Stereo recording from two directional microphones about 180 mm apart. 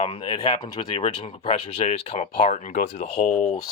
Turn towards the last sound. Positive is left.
turn(degrees=40)  # may be behind; listen again after turning